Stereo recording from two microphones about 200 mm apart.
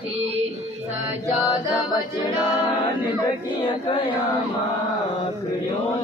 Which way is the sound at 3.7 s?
25° left (ahead or behind).